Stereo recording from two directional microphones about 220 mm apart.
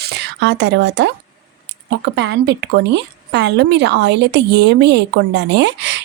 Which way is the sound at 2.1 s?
50° right (ahead or behind).